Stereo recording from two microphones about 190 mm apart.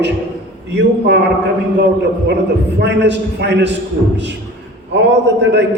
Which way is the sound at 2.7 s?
65° right (ahead or behind).